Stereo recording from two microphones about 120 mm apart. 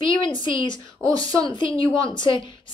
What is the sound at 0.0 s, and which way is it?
A woman's voice, 45° left (ahead or behind).